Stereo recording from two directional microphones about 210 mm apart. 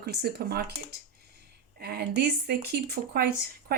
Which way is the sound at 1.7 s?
50° right (ahead or behind).